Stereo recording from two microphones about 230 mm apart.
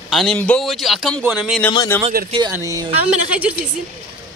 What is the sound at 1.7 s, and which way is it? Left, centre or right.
Speech, centre.